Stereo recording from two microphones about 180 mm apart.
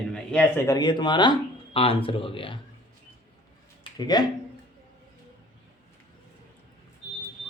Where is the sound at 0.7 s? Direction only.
25° left (ahead or behind).